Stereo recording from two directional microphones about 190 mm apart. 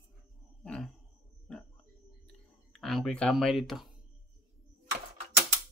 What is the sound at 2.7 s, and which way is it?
Speech, centre (ahead or behind).